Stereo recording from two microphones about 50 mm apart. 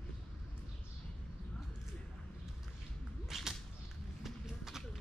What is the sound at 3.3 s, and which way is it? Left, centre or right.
Whip, centre.